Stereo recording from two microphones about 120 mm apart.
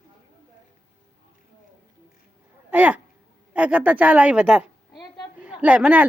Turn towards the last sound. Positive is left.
turn(degrees=-10)  # may be behind; listen again after turning